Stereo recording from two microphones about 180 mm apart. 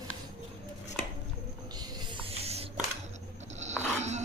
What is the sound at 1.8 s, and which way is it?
Music, 25° right (ahead or behind).